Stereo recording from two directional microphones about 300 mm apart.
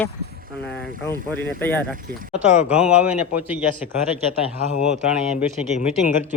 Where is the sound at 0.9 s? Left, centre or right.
Right.